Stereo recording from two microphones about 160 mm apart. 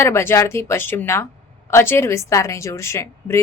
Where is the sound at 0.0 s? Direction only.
15° left (ahead or behind).